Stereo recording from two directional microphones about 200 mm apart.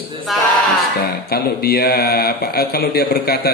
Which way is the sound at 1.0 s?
50° left (ahead or behind).